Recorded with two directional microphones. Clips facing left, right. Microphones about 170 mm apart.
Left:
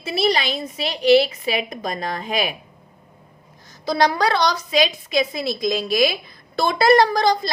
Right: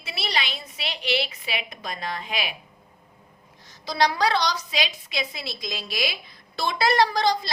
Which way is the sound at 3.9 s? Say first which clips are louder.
Left 4 dB; 50° left (ahead or behind).